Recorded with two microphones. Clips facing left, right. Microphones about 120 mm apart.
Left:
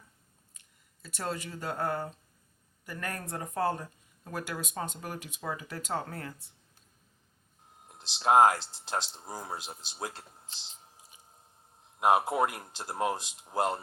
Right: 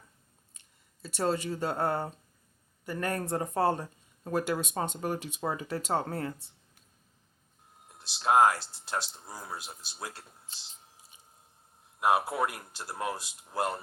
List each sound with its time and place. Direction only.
1.0 s speech: 30° right (ahead or behind)
7.9 s speech: 25° left (ahead or behind)
11.9 s speech: 20° left (ahead or behind)